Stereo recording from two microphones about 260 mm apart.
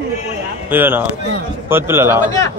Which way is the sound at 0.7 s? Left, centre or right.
Centre.